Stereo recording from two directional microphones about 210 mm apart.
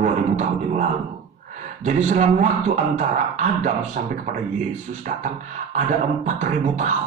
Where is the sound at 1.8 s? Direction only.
35° right (ahead or behind).